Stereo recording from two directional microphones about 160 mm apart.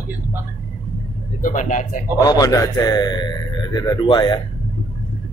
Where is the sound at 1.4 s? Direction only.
55° left (ahead or behind).